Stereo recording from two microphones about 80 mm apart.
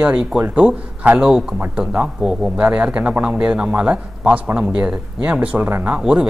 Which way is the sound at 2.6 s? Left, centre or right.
Centre.